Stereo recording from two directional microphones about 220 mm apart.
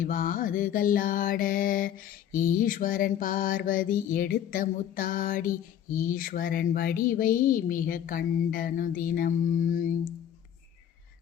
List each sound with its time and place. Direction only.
0.0 s mantra: 35° left (ahead or behind)